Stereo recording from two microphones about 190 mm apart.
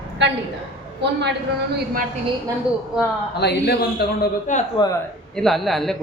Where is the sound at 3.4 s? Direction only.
60° left (ahead or behind).